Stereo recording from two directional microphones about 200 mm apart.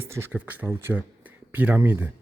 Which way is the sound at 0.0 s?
10° right (ahead or behind).